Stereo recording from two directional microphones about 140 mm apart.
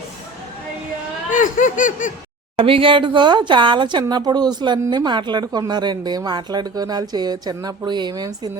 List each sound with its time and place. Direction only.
1.3 s laughter: 70° left (ahead or behind)
2.6 s speech: 40° right (ahead or behind)